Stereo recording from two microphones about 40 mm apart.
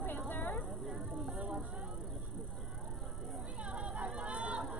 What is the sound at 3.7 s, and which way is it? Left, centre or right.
Music, right.